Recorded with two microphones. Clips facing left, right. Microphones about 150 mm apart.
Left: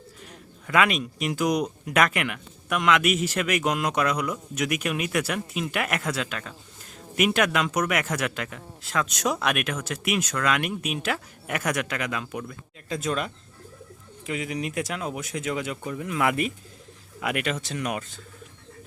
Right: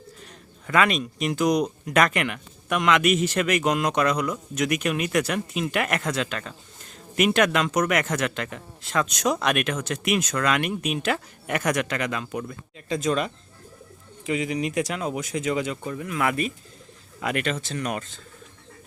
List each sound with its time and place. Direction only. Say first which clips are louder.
0.3 s speech: right 1 dB; 5° left (ahead or behind)
16.0 s speech: left 1 dB; 20° left (ahead or behind)
17.2 s speech: right 1 dB; 10° left (ahead or behind)